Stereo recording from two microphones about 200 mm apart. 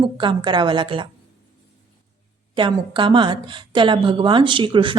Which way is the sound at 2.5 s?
25° right (ahead or behind).